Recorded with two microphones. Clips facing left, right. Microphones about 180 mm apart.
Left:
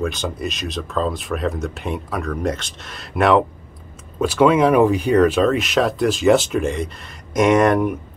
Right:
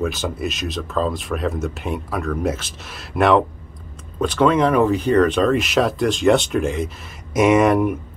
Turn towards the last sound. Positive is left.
turn(degrees=0)  # may be behind; listen again after turning